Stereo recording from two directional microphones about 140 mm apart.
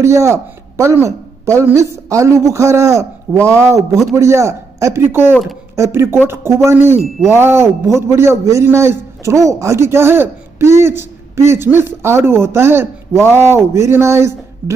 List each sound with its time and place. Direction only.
0.0 s a woman's voice: 20° right (ahead or behind)
5.3 s speech: centre (ahead or behind)
5.8 s a man's voice: 20° right (ahead or behind)